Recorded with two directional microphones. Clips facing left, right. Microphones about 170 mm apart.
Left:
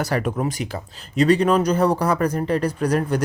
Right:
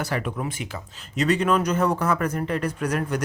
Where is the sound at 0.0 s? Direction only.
40° left (ahead or behind).